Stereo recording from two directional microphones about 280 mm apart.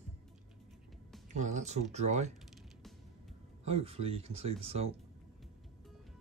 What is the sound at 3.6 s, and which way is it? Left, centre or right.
Speech, right.